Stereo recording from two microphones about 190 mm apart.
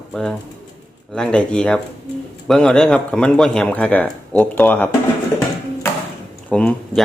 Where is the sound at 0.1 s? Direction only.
Centre (ahead or behind).